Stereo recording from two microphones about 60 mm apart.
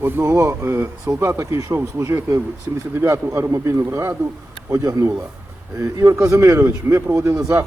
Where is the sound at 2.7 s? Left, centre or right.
Right.